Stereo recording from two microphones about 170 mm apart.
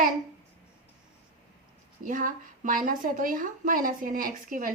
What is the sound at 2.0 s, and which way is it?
A woman's voice, 55° right (ahead or behind).